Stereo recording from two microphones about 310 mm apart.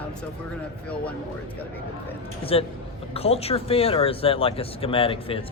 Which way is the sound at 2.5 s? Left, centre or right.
Centre.